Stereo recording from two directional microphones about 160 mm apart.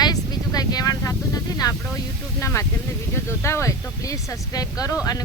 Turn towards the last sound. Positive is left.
turn(degrees=20)  # may be behind; listen again after turning